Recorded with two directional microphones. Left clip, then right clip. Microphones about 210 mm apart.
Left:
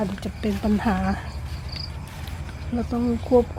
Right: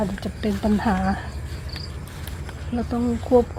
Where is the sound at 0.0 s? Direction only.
10° right (ahead or behind).